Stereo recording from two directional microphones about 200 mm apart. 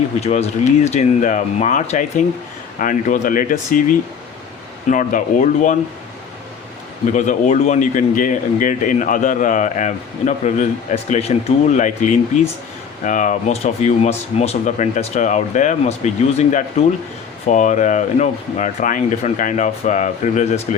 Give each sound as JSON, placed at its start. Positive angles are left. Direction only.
{"t": 0.2, "sound": "speech", "side_deg": 35}
{"t": 7.1, "sound": "speech", "side_deg": 40}